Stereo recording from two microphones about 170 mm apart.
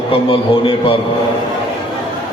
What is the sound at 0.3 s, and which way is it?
Speech, 30° left (ahead or behind).